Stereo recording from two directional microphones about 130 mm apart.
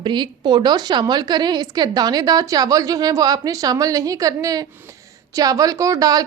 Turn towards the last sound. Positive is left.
turn(degrees=-30)  # may be behind; listen again after turning